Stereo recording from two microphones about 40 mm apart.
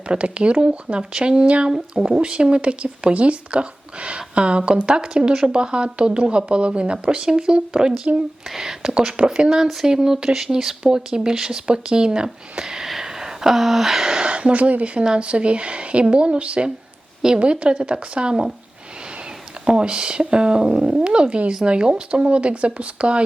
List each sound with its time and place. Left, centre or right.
0.1 s a woman's voice: right
12.9 s a sound: centre
14.3 s a woman's voice: right
19.6 s a woman's voice: right